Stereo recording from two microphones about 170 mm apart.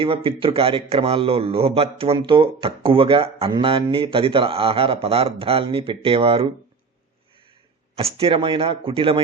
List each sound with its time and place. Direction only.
0.0 s speech: 30° right (ahead or behind)
7.9 s speech: 35° right (ahead or behind)